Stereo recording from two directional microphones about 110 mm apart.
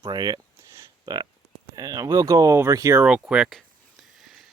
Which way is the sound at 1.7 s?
35° right (ahead or behind).